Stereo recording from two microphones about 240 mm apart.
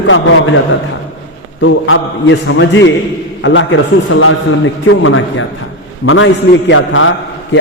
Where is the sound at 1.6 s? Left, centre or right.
Left.